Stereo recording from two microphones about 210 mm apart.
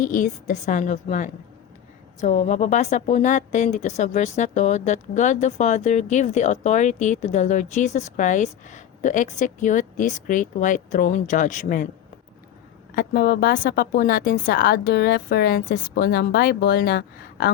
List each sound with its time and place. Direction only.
0.0 s a woman's voice: 40° left (ahead or behind)
13.0 s speech: 45° left (ahead or behind)